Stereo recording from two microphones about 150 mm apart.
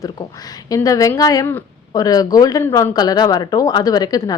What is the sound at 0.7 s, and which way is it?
Speech, 20° left (ahead or behind).